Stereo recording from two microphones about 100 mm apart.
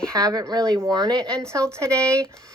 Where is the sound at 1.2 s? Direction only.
10° left (ahead or behind).